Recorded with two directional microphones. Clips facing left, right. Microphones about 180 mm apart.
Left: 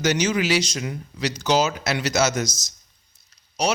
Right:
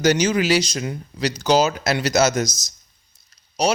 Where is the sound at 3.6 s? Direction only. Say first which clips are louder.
Right 3 dB; 35° right (ahead or behind).